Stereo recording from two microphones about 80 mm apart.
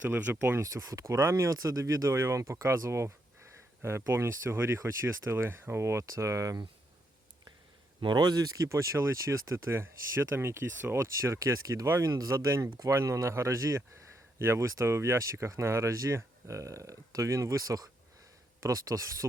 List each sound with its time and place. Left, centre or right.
0.1 s speech: right
0.6 s speech: right
8.0 s speech: right